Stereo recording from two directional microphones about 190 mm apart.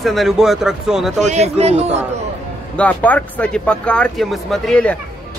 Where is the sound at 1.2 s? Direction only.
35° right (ahead or behind).